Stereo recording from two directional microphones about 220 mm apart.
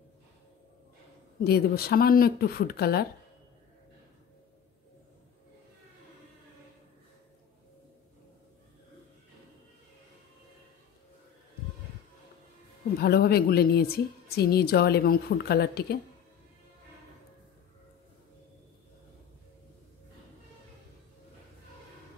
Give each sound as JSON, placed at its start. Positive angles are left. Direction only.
{"t": 1.4, "sound": "a woman's voice", "side_deg": 45}
{"t": 13.0, "sound": "a woman's voice", "side_deg": 45}